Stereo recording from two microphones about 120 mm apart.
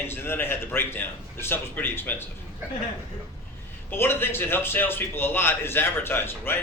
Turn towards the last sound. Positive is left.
turn(degrees=20)  # may be behind; listen again after turning